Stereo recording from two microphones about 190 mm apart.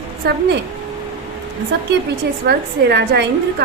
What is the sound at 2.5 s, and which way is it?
A woman's voice, 60° right (ahead or behind).